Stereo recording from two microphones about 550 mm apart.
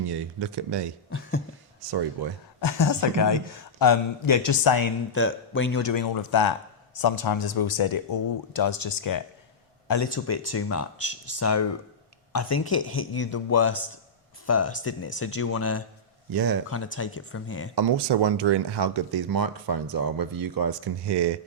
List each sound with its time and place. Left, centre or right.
0.0 s speech: right
1.9 s speech: right
2.6 s speech: left
5.1 s speech: left
5.8 s speech: left
16.3 s speech: right
16.6 s speech: left
17.7 s speech: right